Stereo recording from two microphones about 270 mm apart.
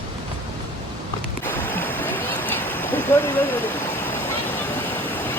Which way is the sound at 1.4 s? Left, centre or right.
Centre.